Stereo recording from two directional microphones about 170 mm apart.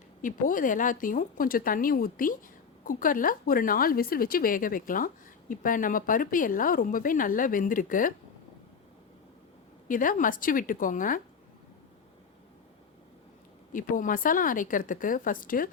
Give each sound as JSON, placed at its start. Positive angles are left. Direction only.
{"t": 0.2, "sound": "speech", "side_deg": 50}
{"t": 9.9, "sound": "speech", "side_deg": 50}
{"t": 13.7, "sound": "speech", "side_deg": 50}